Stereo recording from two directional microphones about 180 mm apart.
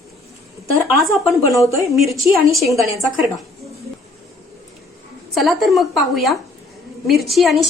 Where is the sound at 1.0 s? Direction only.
Centre (ahead or behind).